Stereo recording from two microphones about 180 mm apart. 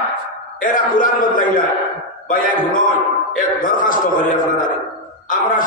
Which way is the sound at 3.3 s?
45° left (ahead or behind).